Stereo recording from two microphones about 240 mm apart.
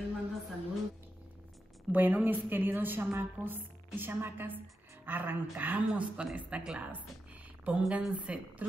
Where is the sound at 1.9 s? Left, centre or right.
Centre.